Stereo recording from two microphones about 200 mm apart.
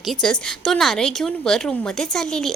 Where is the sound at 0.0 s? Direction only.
Centre (ahead or behind).